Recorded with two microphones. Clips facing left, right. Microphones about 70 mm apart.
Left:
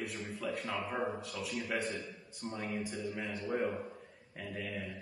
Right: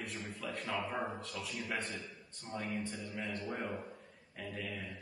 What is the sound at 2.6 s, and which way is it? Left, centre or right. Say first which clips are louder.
Mantra: left 3 dB; centre.